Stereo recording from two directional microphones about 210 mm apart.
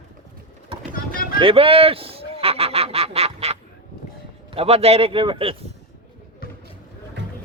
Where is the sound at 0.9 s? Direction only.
45° left (ahead or behind).